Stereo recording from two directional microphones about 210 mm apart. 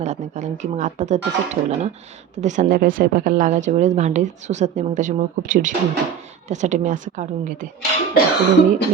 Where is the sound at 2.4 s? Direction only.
35° right (ahead or behind).